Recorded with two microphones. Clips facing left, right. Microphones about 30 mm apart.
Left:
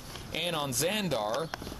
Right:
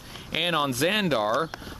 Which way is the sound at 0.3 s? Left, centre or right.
Right.